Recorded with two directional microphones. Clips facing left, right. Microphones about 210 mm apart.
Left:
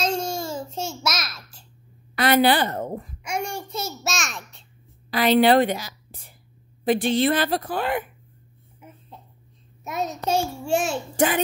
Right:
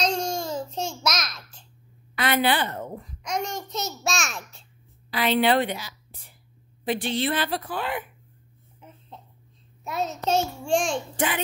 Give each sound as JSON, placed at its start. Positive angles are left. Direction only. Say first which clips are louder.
{"t": 0.0, "sound": "babbling", "louder": "left 1 dB", "side_deg": 5}
{"t": 2.1, "sound": "a woman's voice", "louder": "left 5 dB", "side_deg": 40}
{"t": 3.3, "sound": "a child's voice", "louder": "even", "side_deg": 10}
{"t": 5.1, "sound": "a woman's voice", "louder": "left 5 dB", "side_deg": 40}
{"t": 8.8, "sound": "a sound", "louder": "left 2 dB", "side_deg": 10}
{"t": 9.8, "sound": "a child's voice", "louder": "even", "side_deg": 15}
{"t": 11.1, "sound": "a woman's voice", "louder": "left 8 dB", "side_deg": 45}